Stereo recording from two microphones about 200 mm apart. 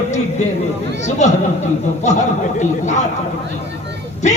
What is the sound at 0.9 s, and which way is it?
Speech, 35° left (ahead or behind).